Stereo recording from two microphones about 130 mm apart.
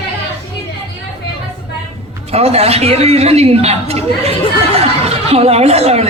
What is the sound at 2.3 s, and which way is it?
A man's voice, 55° right (ahead or behind).